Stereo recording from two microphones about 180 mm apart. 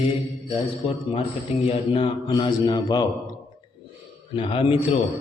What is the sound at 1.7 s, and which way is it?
Mantra, 25° left (ahead or behind).